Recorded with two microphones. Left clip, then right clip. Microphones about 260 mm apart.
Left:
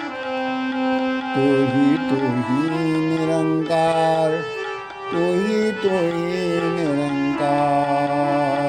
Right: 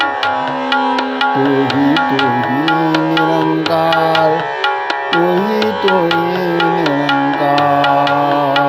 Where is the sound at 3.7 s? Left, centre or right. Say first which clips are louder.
Right 5 dB; centre.